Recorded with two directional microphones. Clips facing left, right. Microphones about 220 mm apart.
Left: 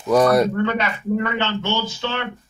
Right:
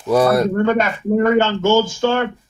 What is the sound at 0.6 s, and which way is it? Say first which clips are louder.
Speech: right 5 dB; 45° right (ahead or behind).